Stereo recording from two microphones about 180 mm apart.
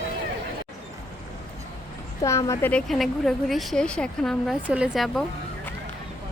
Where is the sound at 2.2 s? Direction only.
15° left (ahead or behind).